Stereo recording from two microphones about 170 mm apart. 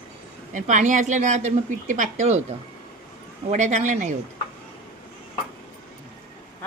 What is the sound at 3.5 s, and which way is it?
Speech, 45° right (ahead or behind).